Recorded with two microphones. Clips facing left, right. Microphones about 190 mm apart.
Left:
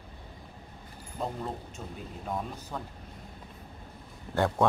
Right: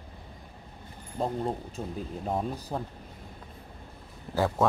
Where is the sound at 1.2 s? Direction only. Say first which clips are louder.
Right 5 dB; 35° right (ahead or behind).